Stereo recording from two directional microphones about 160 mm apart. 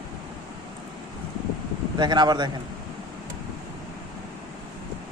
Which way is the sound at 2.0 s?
30° right (ahead or behind).